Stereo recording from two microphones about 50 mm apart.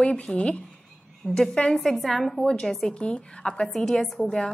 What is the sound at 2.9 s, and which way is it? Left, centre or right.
Speech, left.